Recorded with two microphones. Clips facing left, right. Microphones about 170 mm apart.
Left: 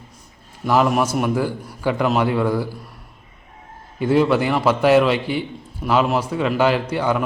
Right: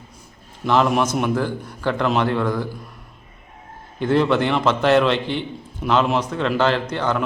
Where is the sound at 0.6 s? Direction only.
5° left (ahead or behind).